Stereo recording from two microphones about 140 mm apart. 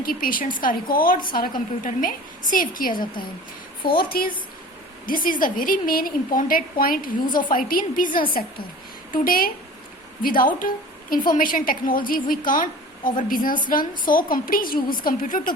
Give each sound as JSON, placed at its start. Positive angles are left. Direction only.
{"t": 0.0, "sound": "a woman's voice", "side_deg": 90}
{"t": 8.3, "sound": "a woman's voice", "side_deg": 90}
{"t": 13.1, "sound": "a woman's voice", "side_deg": 80}